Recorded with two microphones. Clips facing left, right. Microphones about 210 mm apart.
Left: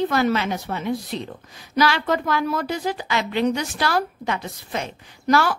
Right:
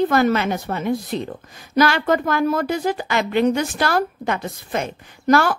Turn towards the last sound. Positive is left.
turn(degrees=-50)  # may be behind; listen again after turning